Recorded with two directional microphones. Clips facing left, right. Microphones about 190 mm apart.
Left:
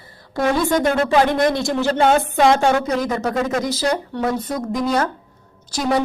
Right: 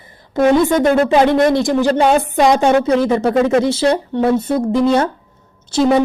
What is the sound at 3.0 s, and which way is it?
A woman's voice, 30° right (ahead or behind).